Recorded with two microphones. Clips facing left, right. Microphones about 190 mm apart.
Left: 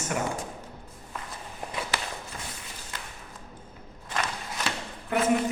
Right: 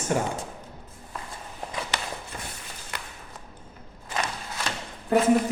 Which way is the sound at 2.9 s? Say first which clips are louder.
Right 3 dB; 70° right (ahead or behind).